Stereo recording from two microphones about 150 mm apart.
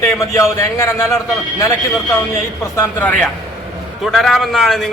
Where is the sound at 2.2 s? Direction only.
20° left (ahead or behind).